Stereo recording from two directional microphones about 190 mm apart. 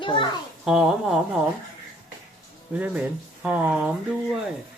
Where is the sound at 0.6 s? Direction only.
5° right (ahead or behind).